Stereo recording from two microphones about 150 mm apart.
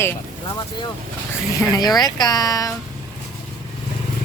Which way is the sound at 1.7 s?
25° left (ahead or behind).